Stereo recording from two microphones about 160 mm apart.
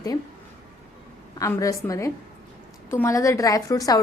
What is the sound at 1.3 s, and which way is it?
A woman's voice, 20° left (ahead or behind).